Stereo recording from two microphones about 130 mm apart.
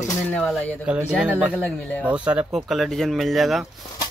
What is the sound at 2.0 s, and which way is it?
Speech, 10° right (ahead or behind).